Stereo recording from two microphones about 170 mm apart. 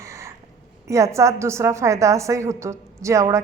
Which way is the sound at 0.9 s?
20° right (ahead or behind).